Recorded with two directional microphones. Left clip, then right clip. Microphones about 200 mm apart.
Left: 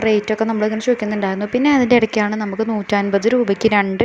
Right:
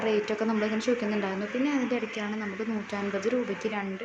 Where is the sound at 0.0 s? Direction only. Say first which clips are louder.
Left 10 dB; 35° left (ahead or behind).